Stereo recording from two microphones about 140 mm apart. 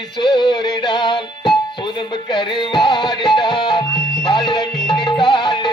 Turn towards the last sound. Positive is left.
turn(degrees=30)  # may be behind; listen again after turning